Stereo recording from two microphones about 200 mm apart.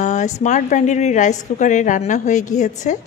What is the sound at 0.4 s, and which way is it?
A woman's voice, 35° left (ahead or behind).